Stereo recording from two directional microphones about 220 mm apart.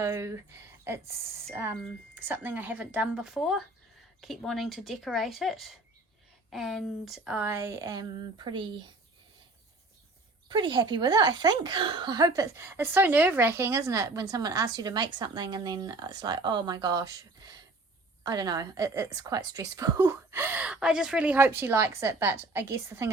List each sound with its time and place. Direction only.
0.0 s a woman's voice: 15° right (ahead or behind)
10.5 s a woman's voice: 20° right (ahead or behind)